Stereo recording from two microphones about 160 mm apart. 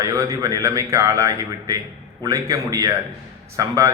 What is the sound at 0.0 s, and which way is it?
A man's voice, 20° right (ahead or behind).